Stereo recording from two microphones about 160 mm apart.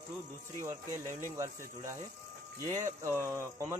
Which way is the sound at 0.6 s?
15° right (ahead or behind).